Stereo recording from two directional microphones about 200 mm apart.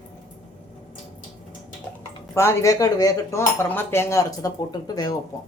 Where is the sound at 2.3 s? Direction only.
15° left (ahead or behind).